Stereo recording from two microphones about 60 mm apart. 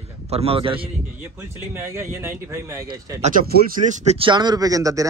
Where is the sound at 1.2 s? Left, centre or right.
Right.